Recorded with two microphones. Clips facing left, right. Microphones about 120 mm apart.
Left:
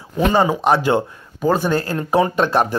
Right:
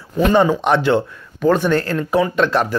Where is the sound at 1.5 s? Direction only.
35° left (ahead or behind).